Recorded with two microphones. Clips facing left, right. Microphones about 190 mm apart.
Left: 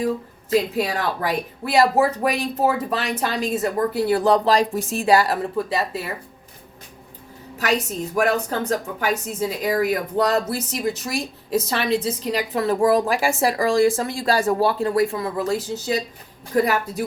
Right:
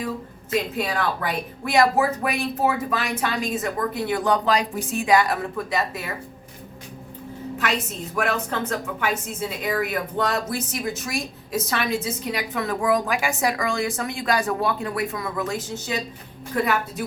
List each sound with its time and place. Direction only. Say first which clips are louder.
0.5 s a woman's voice: left 4 dB; 35° left (ahead or behind)
7.6 s a woman's voice: left 5 dB; 40° left (ahead or behind)